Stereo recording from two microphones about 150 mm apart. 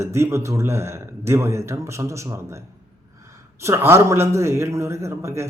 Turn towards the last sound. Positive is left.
turn(degrees=-20)  # may be behind; listen again after turning